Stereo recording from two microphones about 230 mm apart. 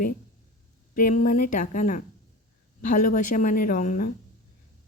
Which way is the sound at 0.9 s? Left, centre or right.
Left.